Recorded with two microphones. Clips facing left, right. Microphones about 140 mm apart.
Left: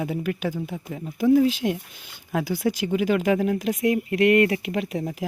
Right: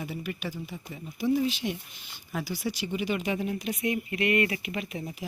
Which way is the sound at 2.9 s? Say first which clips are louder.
Left 8 dB; 90° left.